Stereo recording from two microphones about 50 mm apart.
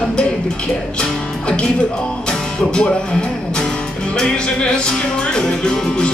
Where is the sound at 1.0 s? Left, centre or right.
Left.